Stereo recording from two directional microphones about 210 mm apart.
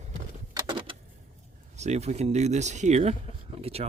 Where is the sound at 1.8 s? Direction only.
30° right (ahead or behind).